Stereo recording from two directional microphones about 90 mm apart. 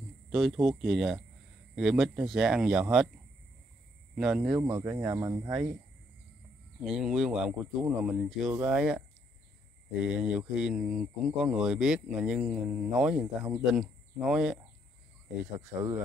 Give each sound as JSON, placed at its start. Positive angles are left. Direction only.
{"t": 0.3, "sound": "speech", "side_deg": 0}
{"t": 4.1, "sound": "speech", "side_deg": -10}
{"t": 4.6, "sound": "speech", "side_deg": -25}
{"t": 5.5, "sound": "speech", "side_deg": -15}
{"t": 6.8, "sound": "speech", "side_deg": -5}
{"t": 10.0, "sound": "speech", "side_deg": -10}